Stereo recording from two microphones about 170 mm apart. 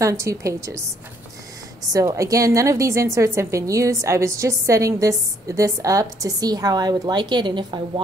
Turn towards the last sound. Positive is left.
turn(degrees=-25)  # may be behind; listen again after turning